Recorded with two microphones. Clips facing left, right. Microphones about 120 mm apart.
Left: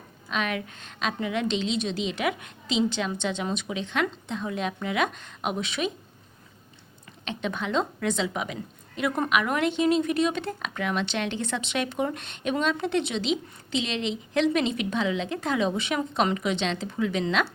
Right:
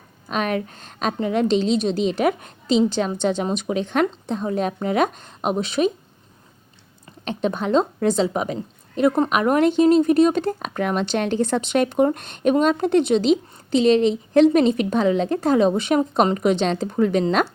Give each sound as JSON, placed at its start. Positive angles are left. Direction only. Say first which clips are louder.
{"t": 0.3, "sound": "a woman's voice", "louder": "right 6 dB", "side_deg": -40}
{"t": 7.3, "sound": "a woman's voice", "louder": "right 8 dB", "side_deg": -40}